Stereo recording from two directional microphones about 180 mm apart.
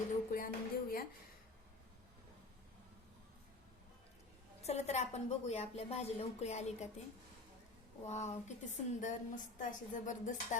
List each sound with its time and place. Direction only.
0.3 s music: 50° left (ahead or behind)
4.6 s a woman's voice: 35° left (ahead or behind)
8.0 s a woman's voice: 40° left (ahead or behind)